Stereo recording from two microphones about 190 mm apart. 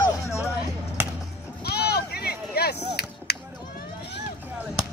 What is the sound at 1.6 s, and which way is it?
Chop, 60° left (ahead or behind).